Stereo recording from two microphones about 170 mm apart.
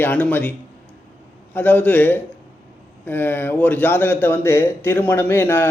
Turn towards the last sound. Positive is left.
turn(degrees=10)  # may be behind; listen again after turning